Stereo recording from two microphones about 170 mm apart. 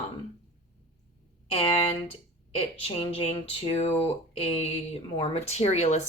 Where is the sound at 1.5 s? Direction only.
35° left (ahead or behind).